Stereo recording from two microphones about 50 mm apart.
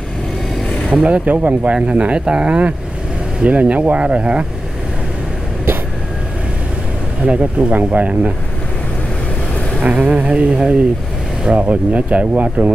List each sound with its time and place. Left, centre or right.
0.9 s speech: right
1.9 s speech: right
7.2 s speech: right
9.8 s speech: right